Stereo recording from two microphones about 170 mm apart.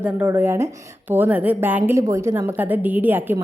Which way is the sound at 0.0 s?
15° right (ahead or behind).